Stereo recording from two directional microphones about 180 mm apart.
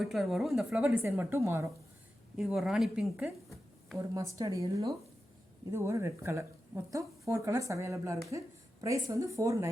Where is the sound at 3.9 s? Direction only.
15° right (ahead or behind).